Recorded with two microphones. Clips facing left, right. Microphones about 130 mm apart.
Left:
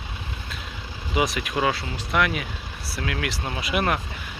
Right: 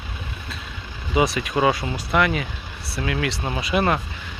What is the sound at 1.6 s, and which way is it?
Speech, 15° right (ahead or behind).